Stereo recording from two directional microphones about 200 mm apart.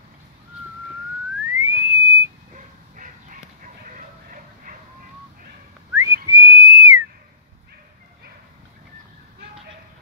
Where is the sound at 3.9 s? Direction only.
40° right (ahead or behind).